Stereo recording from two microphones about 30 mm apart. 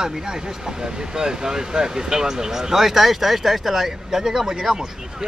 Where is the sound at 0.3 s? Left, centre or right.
Right.